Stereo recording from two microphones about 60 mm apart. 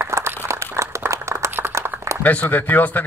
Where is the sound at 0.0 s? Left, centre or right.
Right.